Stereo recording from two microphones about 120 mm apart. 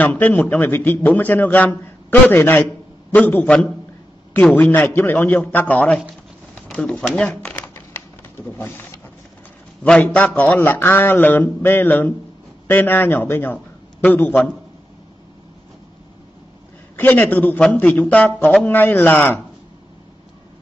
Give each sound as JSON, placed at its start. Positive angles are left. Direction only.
{"t": 0.0, "sound": "a man's voice", "side_deg": 15}
{"t": 7.5, "sound": "typing", "side_deg": 20}
{"t": 8.5, "sound": "speech", "side_deg": 20}
{"t": 9.8, "sound": "a man's voice", "side_deg": 10}
{"t": 16.9, "sound": "a man's voice", "side_deg": 15}